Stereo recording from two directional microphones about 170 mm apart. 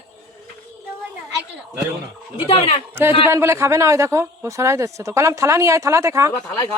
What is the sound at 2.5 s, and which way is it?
Speech, 35° left (ahead or behind).